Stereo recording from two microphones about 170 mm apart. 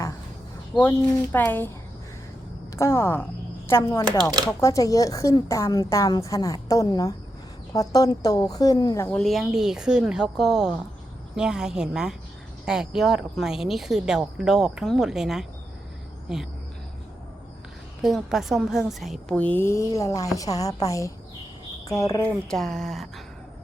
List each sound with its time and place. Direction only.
0.8 s a woman's voice: 10° left (ahead or behind)
2.7 s a woman's voice: 15° left (ahead or behind)
9.0 s speech: 5° left (ahead or behind)
18.0 s a woman's voice: centre (ahead or behind)